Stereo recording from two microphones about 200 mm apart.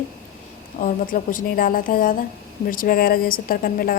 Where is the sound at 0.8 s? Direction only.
40° left (ahead or behind).